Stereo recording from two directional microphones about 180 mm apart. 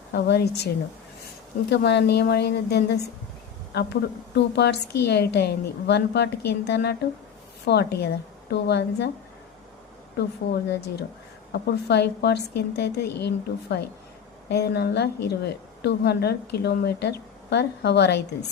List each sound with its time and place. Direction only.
0.1 s a woman's voice: 65° left (ahead or behind)
1.7 s a woman's voice: 70° left (ahead or behind)
4.4 s a woman's voice: 70° left (ahead or behind)
10.2 s a woman's voice: 65° left (ahead or behind)